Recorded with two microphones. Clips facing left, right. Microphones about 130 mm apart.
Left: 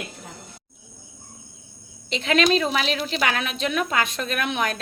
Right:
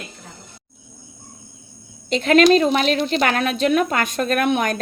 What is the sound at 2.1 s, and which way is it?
Speech, 45° right (ahead or behind).